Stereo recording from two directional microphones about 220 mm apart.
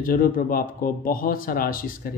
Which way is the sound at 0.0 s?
40° left (ahead or behind).